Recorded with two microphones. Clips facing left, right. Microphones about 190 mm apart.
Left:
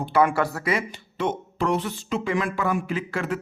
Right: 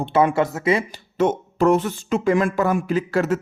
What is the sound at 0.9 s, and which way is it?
Speech, 45° right (ahead or behind).